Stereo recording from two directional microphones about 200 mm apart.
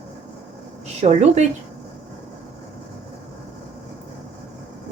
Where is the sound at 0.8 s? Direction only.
35° right (ahead or behind).